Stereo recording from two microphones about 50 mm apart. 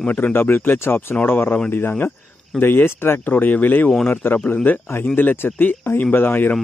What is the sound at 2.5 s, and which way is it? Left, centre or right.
Speech, left.